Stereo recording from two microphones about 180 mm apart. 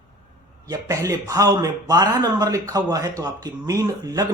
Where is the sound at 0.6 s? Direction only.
20° right (ahead or behind).